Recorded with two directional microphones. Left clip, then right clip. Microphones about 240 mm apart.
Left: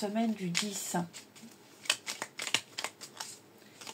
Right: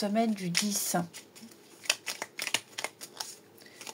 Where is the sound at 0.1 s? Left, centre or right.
Right.